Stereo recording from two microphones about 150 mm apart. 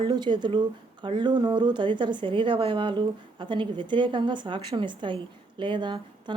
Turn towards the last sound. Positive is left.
turn(degrees=-30)  # may be behind; listen again after turning